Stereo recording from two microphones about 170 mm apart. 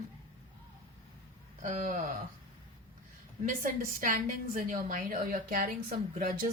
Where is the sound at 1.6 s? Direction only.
45° right (ahead or behind).